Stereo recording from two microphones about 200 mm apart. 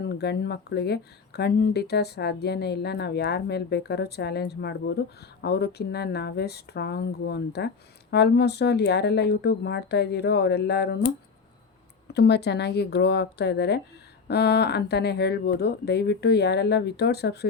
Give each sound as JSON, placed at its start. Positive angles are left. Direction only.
{"t": 0.0, "sound": "speech", "side_deg": 55}
{"t": 12.1, "sound": "speech", "side_deg": 55}